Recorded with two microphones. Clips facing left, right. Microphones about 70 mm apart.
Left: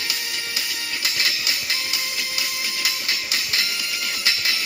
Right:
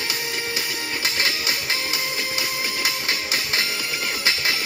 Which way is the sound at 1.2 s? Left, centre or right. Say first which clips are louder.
Right 1 dB; right.